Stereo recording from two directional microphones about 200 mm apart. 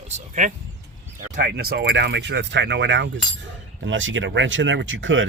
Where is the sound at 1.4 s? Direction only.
50° right (ahead or behind); by 5.2 s 70° right (ahead or behind).